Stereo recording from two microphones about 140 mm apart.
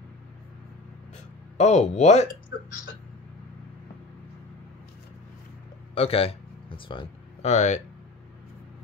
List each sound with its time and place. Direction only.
1.1 s speech: 55° left (ahead or behind)
5.9 s a man's voice: 45° left (ahead or behind)
7.4 s speech: 55° left (ahead or behind)